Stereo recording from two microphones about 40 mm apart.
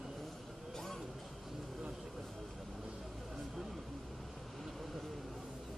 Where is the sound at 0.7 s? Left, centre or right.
Centre.